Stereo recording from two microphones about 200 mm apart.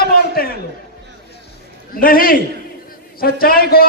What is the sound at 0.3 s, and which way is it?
Speech, 50° left (ahead or behind).